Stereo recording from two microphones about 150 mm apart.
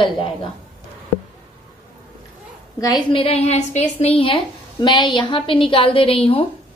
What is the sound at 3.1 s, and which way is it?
Speech, 40° left (ahead or behind).